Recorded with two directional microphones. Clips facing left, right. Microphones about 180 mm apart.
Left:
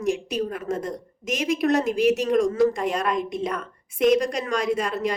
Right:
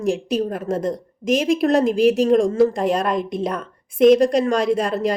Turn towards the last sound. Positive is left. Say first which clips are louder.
# right 5 dB
turn(degrees=-35)  # may be behind; listen again after turning